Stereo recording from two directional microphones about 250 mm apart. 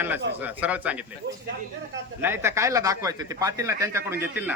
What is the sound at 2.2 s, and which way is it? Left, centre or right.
Speech, centre.